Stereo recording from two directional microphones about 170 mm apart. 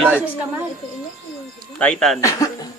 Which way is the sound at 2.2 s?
20° left (ahead or behind).